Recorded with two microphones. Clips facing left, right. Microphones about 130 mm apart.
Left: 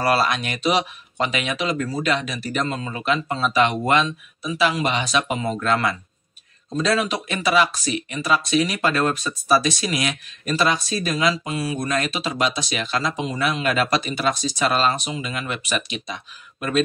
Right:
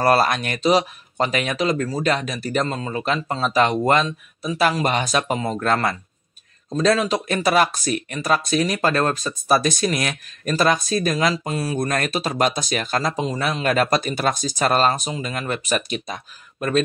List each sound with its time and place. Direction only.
0.0 s speech: 45° right (ahead or behind)